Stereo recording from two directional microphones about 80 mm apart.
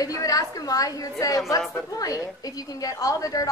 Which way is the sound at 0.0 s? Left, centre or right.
Left.